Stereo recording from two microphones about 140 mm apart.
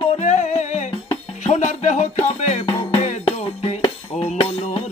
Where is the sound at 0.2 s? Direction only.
55° left (ahead or behind).